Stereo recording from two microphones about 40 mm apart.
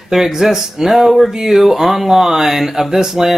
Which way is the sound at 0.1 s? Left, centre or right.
Centre.